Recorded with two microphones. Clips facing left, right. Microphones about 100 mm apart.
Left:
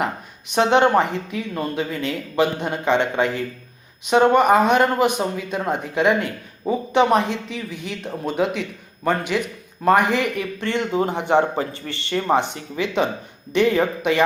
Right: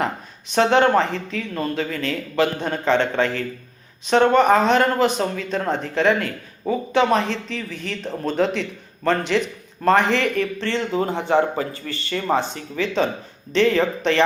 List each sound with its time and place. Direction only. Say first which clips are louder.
0.5 s speech: even; 15° left (ahead or behind)